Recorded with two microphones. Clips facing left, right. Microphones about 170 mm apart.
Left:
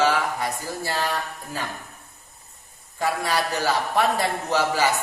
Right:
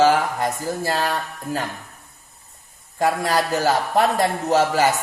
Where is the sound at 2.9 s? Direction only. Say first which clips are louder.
Right 4 dB; 40° right (ahead or behind).